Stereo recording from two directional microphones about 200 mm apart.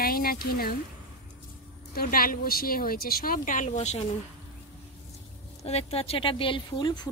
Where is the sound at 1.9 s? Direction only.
50° left (ahead or behind).